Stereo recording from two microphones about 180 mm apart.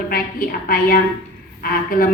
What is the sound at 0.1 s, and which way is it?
A woman's voice, 50° left (ahead or behind).